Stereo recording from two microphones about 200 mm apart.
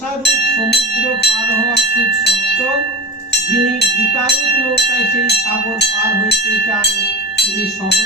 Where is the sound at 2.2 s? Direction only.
55° left (ahead or behind).